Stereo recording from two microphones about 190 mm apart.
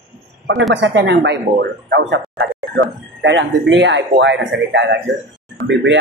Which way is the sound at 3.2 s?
75° right (ahead or behind).